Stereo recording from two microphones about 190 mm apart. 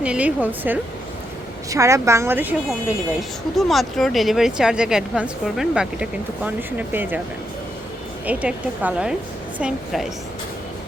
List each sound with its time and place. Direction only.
0.0 s a woman's voice: 5° right (ahead or behind)
3.2 s speech: centre (ahead or behind)
8.3 s a woman's voice: 10° right (ahead or behind)